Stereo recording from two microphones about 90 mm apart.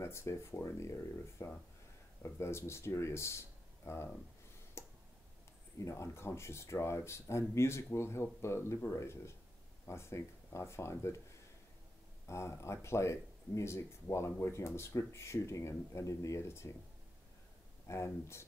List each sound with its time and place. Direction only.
0.0 s speech: 30° left (ahead or behind)
4.8 s tick: 30° left (ahead or behind)
5.8 s speech: 30° left (ahead or behind)
12.3 s speech: 30° left (ahead or behind)
17.8 s speech: 30° left (ahead or behind)